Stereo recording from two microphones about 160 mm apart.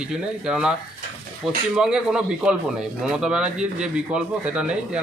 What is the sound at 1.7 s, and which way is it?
Speech, 5° right (ahead or behind).